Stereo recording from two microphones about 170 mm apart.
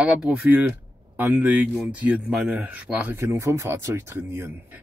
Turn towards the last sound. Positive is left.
turn(degrees=-15)  # may be behind; listen again after turning